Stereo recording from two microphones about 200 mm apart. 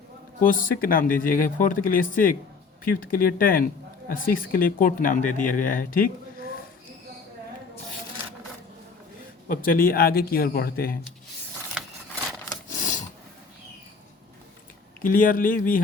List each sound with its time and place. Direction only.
0.3 s speech: 40° left (ahead or behind)
9.5 s speech: 45° left (ahead or behind)
12.6 s a sound: 40° left (ahead or behind)
15.0 s speech: 40° left (ahead or behind)